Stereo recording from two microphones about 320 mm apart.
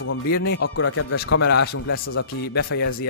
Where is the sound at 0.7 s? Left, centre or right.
Left.